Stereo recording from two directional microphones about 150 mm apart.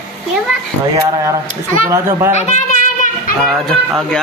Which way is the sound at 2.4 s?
50° left (ahead or behind).